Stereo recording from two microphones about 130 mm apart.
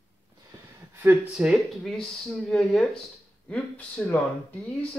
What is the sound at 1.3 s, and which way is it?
Speech, 5° right (ahead or behind).